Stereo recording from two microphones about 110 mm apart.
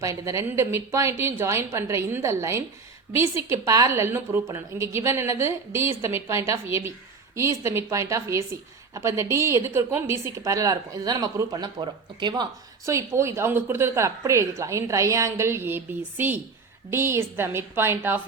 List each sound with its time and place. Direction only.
0.0 s a woman's voice: 30° right (ahead or behind)
12.8 s a woman's voice: 25° right (ahead or behind)